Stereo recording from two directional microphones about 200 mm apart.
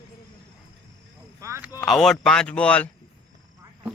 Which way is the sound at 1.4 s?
15° right (ahead or behind).